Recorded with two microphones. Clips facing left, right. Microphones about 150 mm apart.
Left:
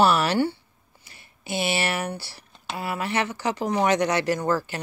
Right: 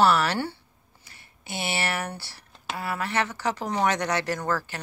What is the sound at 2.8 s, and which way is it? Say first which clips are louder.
Speech: left 1 dB; 15° left (ahead or behind).